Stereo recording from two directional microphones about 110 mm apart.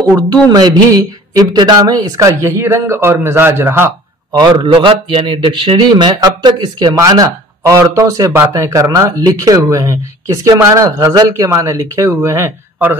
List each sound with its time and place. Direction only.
0.5 s speech: 35° right (ahead or behind); by 3.9 s 20° right (ahead or behind)
4.3 s a man's voice: 40° right (ahead or behind)
4.6 s speech: 50° right (ahead or behind); by 12.5 s 25° right (ahead or behind)